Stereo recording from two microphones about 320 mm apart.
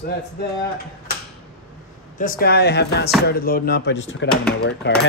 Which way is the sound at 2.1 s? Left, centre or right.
Left.